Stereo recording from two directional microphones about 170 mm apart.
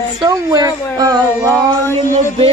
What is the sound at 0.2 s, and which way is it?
Speech, 20° right (ahead or behind).